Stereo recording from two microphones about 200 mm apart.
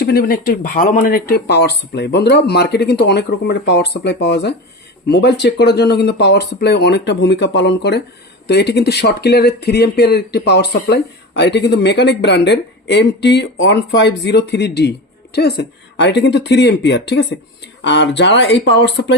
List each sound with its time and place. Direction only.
0.0 s speech: 50° left (ahead or behind)